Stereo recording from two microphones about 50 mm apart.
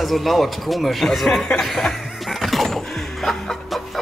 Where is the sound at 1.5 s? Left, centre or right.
Centre.